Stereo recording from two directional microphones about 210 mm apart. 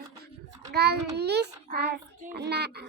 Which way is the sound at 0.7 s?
50° right (ahead or behind).